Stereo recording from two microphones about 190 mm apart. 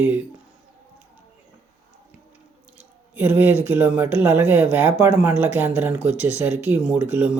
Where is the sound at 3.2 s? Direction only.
10° right (ahead or behind).